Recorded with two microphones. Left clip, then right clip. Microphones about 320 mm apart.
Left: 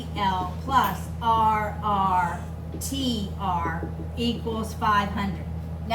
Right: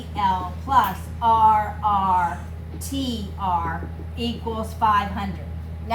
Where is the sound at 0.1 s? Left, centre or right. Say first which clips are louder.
Right 4 dB; centre.